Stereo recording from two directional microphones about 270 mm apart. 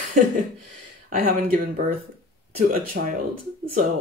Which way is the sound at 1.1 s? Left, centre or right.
Right.